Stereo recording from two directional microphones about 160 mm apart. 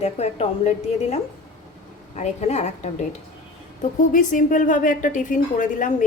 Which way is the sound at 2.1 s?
45° left (ahead or behind).